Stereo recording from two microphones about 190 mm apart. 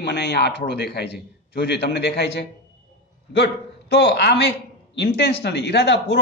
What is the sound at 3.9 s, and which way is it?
Speech, 60° left (ahead or behind).